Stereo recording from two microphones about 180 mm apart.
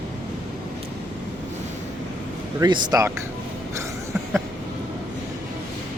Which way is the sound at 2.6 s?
25° right (ahead or behind).